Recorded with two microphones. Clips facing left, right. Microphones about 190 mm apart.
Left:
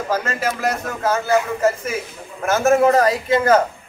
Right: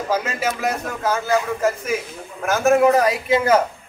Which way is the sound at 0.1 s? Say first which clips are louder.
Even; 5° right (ahead or behind).